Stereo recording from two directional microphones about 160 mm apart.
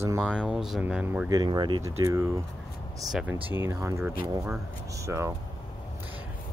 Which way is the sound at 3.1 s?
5° right (ahead or behind).